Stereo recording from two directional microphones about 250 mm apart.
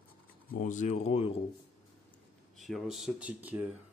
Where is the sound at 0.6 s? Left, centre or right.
Left.